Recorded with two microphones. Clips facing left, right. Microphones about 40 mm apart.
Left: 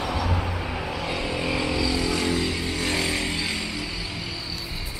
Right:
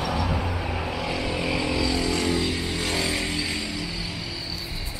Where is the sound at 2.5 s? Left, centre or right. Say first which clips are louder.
Left 1 dB; centre.